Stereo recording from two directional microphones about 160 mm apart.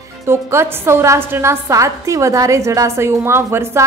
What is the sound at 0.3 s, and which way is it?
A woman's voice, 15° right (ahead or behind).